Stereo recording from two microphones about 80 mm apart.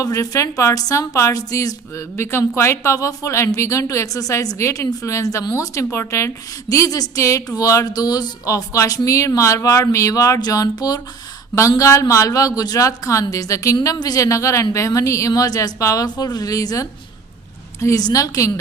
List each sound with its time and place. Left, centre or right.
0.0 s a woman's voice: left
7.9 s speech: left
11.8 s a woman's voice: left